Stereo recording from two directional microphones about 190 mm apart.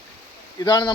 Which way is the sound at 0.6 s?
20° left (ahead or behind).